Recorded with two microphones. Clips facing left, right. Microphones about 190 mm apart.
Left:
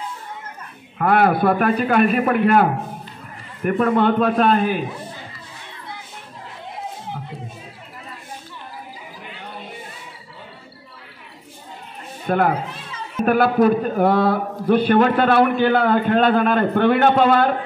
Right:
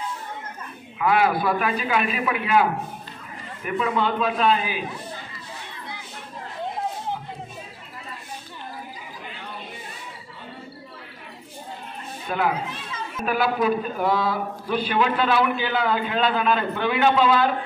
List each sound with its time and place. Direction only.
0.9 s a man's voice: 55° left (ahead or behind)
12.3 s a man's voice: 50° left (ahead or behind)